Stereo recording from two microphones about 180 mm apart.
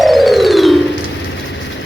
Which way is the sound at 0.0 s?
Centre (ahead or behind).